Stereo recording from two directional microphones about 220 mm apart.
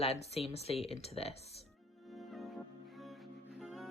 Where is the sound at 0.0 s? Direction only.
30° left (ahead or behind).